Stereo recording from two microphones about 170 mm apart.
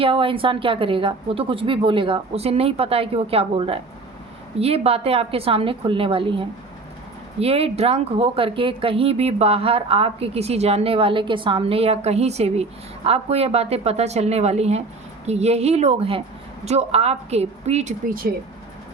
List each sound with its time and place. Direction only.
0.0 s speech: 30° right (ahead or behind)